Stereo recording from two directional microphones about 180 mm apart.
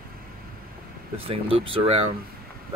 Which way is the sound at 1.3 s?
30° right (ahead or behind).